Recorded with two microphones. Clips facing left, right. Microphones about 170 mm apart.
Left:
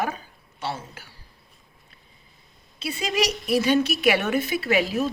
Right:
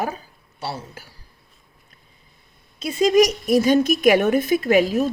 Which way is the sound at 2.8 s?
45° right (ahead or behind).